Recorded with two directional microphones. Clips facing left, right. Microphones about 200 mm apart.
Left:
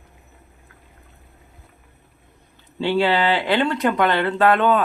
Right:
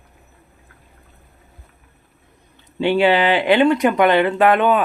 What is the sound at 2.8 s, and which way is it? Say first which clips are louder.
Speech: right 4 dB; 15° right (ahead or behind).